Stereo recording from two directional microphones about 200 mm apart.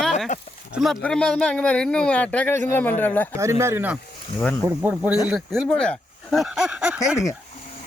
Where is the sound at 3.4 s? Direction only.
15° right (ahead or behind).